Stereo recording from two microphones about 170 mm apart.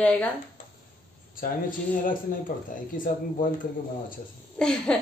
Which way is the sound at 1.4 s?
55° left (ahead or behind).